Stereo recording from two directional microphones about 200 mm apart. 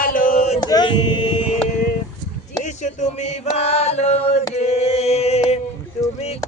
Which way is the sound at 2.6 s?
35° left (ahead or behind).